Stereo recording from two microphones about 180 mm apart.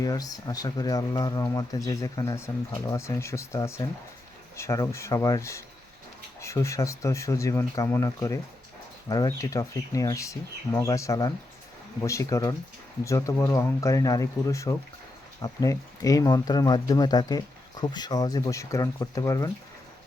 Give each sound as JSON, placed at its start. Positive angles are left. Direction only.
{"t": 0.0, "sound": "speech", "side_deg": 20}